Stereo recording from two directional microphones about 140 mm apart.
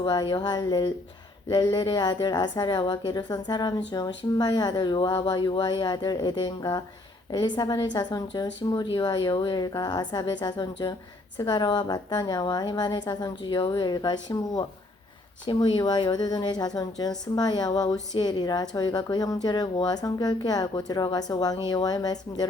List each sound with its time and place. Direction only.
0.0 s a woman's voice: 30° left (ahead or behind)